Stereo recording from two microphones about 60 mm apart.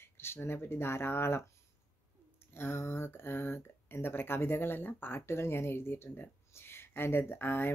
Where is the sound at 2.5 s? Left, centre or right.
Left.